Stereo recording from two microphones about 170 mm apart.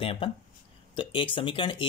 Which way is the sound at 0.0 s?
30° left (ahead or behind).